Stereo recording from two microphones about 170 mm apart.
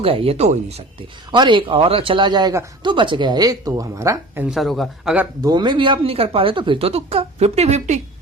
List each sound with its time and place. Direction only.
0.0 s speech: 35° right (ahead or behind)
1.3 s speech: 30° right (ahead or behind)
4.4 s speech: centre (ahead or behind)
5.4 s speech: 25° right (ahead or behind); by 8.0 s 40° right (ahead or behind)